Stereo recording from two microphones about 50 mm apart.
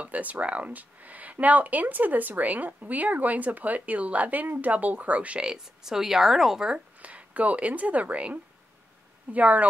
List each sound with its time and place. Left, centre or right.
0.0 s speech: right
5.4 s speech: centre
6.7 s speech: right